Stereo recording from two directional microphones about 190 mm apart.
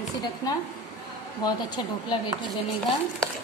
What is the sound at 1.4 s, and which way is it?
Speech, 20° left (ahead or behind).